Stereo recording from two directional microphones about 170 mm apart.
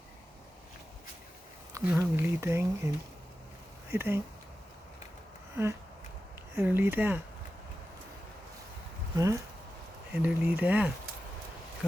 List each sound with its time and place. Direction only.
1.9 s speech: 10° right (ahead or behind)
6.6 s speech: 10° right (ahead or behind)
9.1 s speech: 20° right (ahead or behind)